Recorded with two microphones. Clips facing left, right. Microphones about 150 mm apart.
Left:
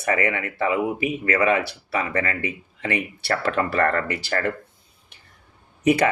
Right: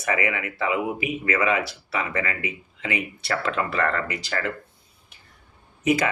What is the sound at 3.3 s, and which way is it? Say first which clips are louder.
Speech: left 3 dB; 50° left (ahead or behind).